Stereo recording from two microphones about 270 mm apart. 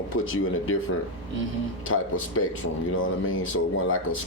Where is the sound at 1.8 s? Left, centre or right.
Left.